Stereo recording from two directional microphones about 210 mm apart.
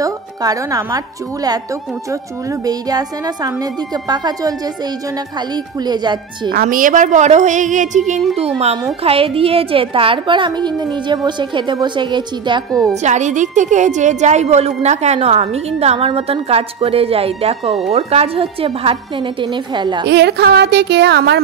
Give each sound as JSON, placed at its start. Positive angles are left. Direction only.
{"t": 0.0, "sound": "a woman's voice", "side_deg": -15}
{"t": 2.6, "sound": "a woman's voice", "side_deg": -20}
{"t": 6.5, "sound": "a woman's voice", "side_deg": -45}
{"t": 9.0, "sound": "a woman's voice", "side_deg": -25}
{"t": 12.9, "sound": "a woman's voice", "side_deg": -35}
{"t": 20.1, "sound": "a woman's voice", "side_deg": -55}